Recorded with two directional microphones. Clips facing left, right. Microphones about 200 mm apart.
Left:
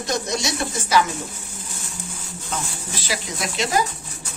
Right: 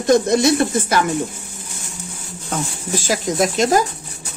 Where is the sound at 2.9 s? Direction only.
45° right (ahead or behind).